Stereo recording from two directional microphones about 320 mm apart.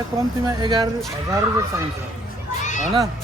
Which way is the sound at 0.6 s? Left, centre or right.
Centre.